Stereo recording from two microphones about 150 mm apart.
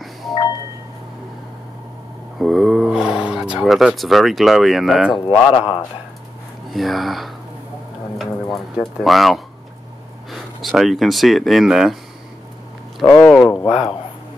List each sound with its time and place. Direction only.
2.3 s speech: centre (ahead or behind)
5.1 s a man's voice: 35° left (ahead or behind)
6.7 s speech: centre (ahead or behind)
8.2 s a sound: centre (ahead or behind)
10.3 s speech: centre (ahead or behind)
13.0 s speech: 10° left (ahead or behind)
13.3 s a sound: centre (ahead or behind)